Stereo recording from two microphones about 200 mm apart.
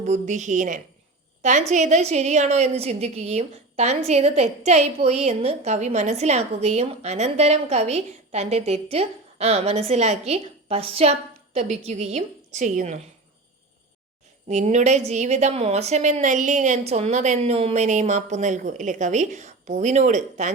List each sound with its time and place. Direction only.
0.0 s a woman's voice: 35° right (ahead or behind)
14.4 s a woman's voice: 35° right (ahead or behind)